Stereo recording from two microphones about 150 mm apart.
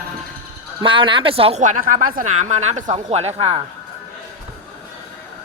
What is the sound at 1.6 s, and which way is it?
Speech, 60° right (ahead or behind).